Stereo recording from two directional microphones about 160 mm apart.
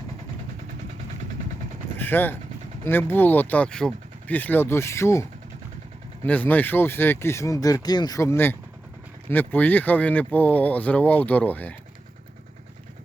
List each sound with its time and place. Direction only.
2.0 s speech: 10° left (ahead or behind)
6.2 s speech: 10° left (ahead or behind)